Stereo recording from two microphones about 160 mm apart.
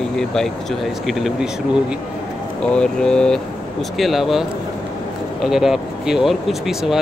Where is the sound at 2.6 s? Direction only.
5° left (ahead or behind).